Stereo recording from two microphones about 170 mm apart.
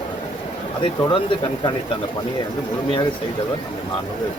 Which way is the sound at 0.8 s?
30° left (ahead or behind).